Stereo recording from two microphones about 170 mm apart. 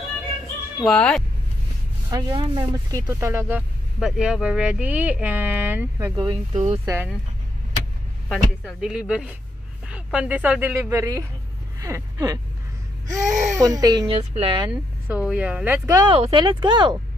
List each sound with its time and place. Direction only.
0.7 s speech: 5° left (ahead or behind)
2.0 s speech: 25° right (ahead or behind)
6.1 s speech: 35° right (ahead or behind)
8.3 s speech: centre (ahead or behind); by 14.7 s 35° right (ahead or behind)
14.7 s speech: 10° right (ahead or behind); by 17.0 s 30° right (ahead or behind)